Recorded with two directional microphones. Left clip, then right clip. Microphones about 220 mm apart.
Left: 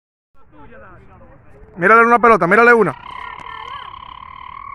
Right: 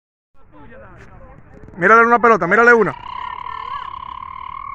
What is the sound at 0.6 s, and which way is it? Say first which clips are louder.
Speech: even; 55° right (ahead or behind).